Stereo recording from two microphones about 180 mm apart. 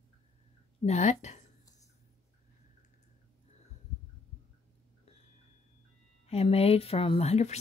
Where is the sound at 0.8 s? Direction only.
40° left (ahead or behind).